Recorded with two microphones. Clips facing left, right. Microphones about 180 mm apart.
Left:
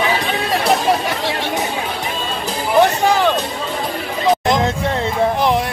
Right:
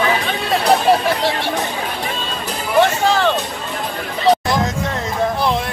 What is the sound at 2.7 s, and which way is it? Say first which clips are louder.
Music: left 1 dB; 15° left (ahead or behind).